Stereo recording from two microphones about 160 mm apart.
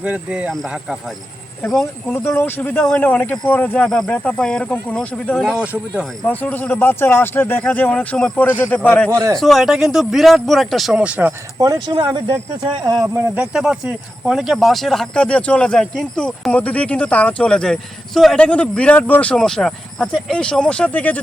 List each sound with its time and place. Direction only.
0.0 s speech: 5° right (ahead or behind)
6.2 s speech: 10° left (ahead or behind)
9.0 s speech: 20° right (ahead or behind)
9.3 s speech: centre (ahead or behind)
11.7 s speech: 25° right (ahead or behind)
13.3 s speech: 5° right (ahead or behind)